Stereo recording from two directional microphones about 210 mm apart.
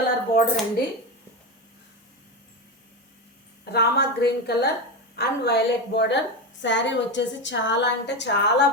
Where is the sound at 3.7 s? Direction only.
50° left (ahead or behind).